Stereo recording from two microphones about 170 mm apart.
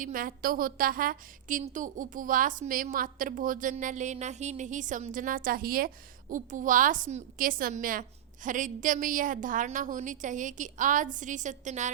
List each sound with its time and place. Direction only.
0.0 s a woman's voice: 55° right (ahead or behind)